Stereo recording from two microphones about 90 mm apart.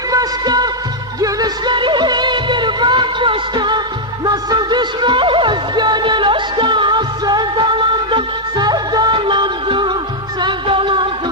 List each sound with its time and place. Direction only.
0.1 s music: 45° right (ahead or behind)
1.7 s music: 60° right (ahead or behind)